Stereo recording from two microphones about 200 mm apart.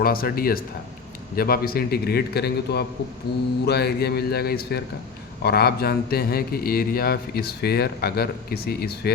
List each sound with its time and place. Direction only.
0.0 s a man's voice: 45° left (ahead or behind)